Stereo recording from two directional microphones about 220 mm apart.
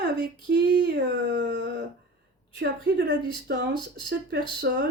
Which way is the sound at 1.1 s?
55° right (ahead or behind).